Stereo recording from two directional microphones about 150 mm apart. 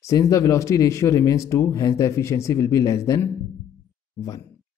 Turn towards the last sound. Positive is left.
turn(degrees=20)  # may be behind; listen again after turning